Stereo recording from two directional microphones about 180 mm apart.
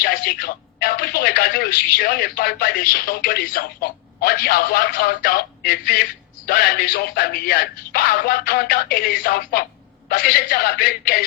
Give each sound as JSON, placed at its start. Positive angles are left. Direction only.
{"t": 0.0, "sound": "a man's voice", "side_deg": 55}